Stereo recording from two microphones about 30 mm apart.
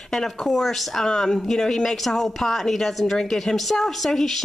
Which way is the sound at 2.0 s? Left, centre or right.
Centre.